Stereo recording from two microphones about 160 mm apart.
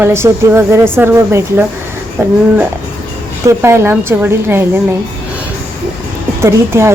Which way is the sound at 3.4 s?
15° right (ahead or behind).